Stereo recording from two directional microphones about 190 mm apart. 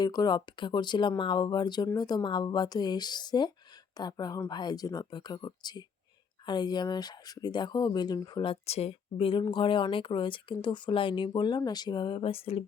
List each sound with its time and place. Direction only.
0.0 s speech: 20° left (ahead or behind)